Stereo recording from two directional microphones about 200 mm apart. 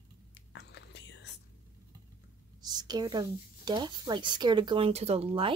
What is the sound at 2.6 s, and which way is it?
Speech, 20° right (ahead or behind).